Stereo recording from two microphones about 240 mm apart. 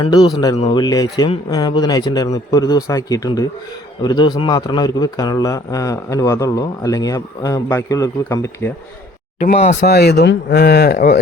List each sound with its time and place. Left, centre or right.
0.0 s a man's voice: centre
9.4 s speech: left
9.8 s speech: left